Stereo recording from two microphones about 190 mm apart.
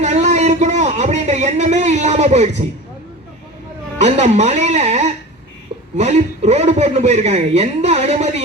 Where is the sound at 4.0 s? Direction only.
35° right (ahead or behind).